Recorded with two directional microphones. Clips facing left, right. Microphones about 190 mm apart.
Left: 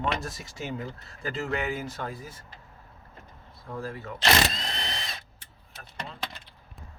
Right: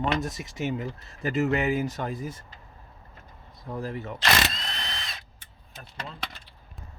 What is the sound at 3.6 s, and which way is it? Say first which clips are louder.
Speech: right 3 dB; 20° right (ahead or behind).